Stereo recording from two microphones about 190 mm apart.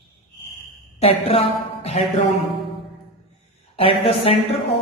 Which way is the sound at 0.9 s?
30° left (ahead or behind).